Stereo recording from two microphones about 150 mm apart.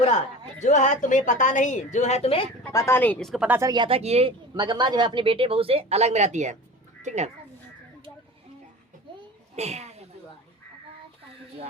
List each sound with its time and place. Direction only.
0.6 s a woman's voice: 55° left (ahead or behind)
2.7 s speech: 15° left (ahead or behind)
3.4 s speech: 15° right (ahead or behind)
3.7 s speech: 35° right (ahead or behind); by 7.3 s 50° right (ahead or behind)
9.6 s speech: 45° right (ahead or behind)